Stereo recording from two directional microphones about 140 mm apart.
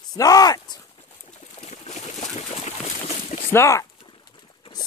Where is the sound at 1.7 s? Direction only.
55° left (ahead or behind).